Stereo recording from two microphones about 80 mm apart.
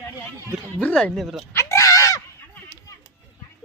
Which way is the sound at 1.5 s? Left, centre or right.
Left.